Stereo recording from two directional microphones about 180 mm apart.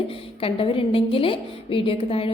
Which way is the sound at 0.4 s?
30° left (ahead or behind).